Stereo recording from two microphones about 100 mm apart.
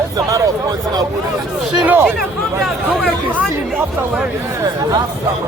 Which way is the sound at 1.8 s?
20° right (ahead or behind).